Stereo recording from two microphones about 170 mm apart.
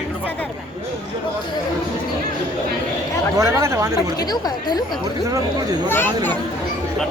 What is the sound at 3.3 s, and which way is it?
Speech, 15° right (ahead or behind).